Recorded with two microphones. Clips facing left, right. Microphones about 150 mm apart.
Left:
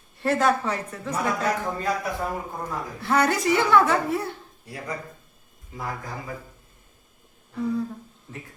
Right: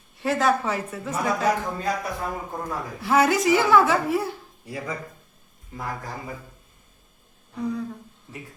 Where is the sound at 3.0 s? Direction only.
5° right (ahead or behind).